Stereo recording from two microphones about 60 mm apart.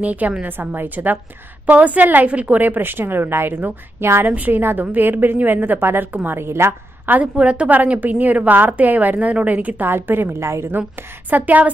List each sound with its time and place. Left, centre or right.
0.0 s a woman's voice: right
4.3 s a woman's voice: right
7.1 s a woman's voice: right
10.4 s a woman's voice: right
11.0 s a woman's voice: right